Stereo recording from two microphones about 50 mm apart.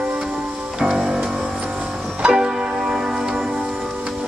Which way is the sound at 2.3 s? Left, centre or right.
Centre.